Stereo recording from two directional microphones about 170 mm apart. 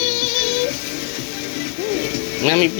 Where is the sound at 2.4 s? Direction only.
45° right (ahead or behind).